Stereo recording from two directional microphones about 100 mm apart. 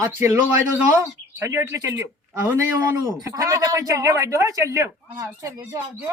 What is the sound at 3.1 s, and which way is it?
Speech, 40° right (ahead or behind).